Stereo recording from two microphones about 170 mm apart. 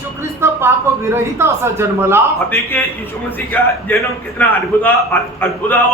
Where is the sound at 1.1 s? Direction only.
15° right (ahead or behind).